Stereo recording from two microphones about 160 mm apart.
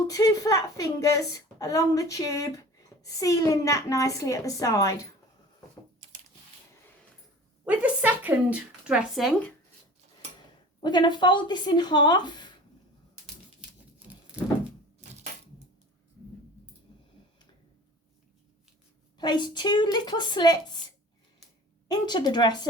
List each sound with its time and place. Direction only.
0.1 s a woman's voice: 25° left (ahead or behind)
7.6 s speech: 10° right (ahead or behind)
10.8 s a woman's voice: 30° left (ahead or behind)
19.2 s a woman's voice: 25° left (ahead or behind)
21.8 s a woman's voice: 25° left (ahead or behind)